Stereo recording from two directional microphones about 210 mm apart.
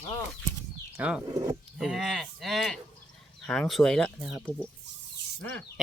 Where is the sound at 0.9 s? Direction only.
5° right (ahead or behind).